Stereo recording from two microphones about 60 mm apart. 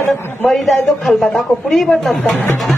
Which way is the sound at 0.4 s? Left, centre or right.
Centre.